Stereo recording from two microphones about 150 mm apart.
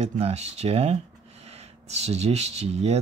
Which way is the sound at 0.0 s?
45° right (ahead or behind).